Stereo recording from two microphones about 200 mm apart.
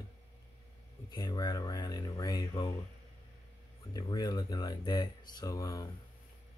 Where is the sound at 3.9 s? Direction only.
20° left (ahead or behind).